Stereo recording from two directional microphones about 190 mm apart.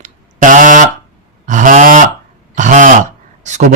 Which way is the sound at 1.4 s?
40° right (ahead or behind).